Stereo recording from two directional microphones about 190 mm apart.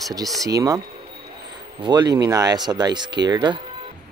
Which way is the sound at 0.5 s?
20° right (ahead or behind).